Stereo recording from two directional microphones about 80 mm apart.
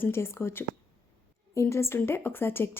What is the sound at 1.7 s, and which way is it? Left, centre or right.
Speech, left.